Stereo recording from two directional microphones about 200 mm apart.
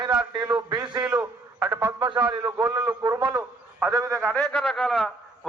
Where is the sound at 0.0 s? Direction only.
20° right (ahead or behind).